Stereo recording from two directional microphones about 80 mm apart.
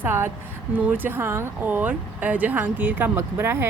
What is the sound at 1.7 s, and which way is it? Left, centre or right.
Speech, right.